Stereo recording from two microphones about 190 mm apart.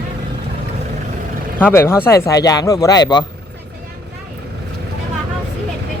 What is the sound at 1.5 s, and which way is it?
Speech, 10° left (ahead or behind).